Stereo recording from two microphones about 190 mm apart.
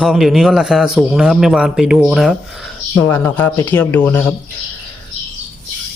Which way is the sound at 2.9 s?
15° left (ahead or behind).